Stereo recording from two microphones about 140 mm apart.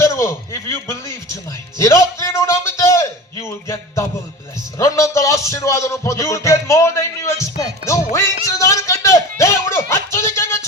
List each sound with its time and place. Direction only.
0.0 s a man's voice: 20° left (ahead or behind)
4.8 s music: 25° left (ahead or behind)
9.9 s a sound: 20° left (ahead or behind)